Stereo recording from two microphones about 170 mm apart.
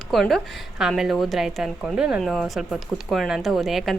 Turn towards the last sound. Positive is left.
turn(degrees=0)  # may be behind; listen again after turning